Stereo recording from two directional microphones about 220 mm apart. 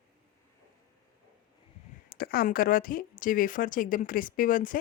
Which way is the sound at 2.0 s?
40° left (ahead or behind).